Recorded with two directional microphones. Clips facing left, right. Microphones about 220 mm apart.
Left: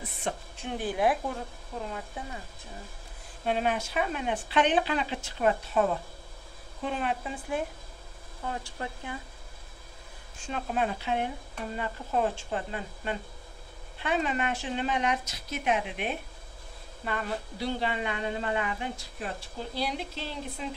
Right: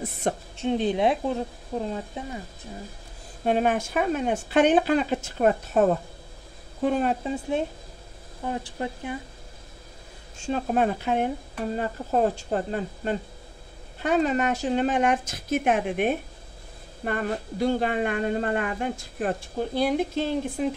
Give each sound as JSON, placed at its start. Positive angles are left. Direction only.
{"t": 0.3, "sound": "speech", "side_deg": -45}
{"t": 0.6, "sound": "speech", "side_deg": -20}
{"t": 3.4, "sound": "speech", "side_deg": -50}
{"t": 7.2, "sound": "speech", "side_deg": -25}
{"t": 10.3, "sound": "speech", "side_deg": -25}
{"t": 10.7, "sound": "speech", "side_deg": -45}